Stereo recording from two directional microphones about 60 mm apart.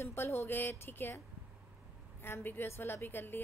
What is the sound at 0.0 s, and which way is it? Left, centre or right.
Speech, left.